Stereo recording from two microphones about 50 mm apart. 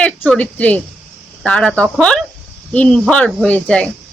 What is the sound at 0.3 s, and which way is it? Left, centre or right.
Speech, left.